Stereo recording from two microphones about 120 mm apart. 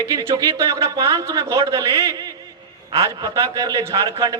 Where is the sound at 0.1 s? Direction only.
30° right (ahead or behind).